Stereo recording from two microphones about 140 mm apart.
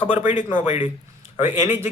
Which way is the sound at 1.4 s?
15° right (ahead or behind).